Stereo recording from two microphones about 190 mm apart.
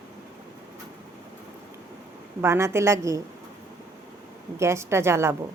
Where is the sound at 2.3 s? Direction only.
15° right (ahead or behind).